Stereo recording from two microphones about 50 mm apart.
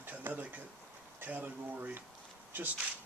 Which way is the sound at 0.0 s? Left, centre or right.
Right.